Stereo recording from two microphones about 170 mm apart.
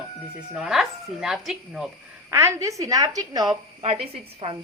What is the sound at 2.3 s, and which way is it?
Speech, 15° right (ahead or behind).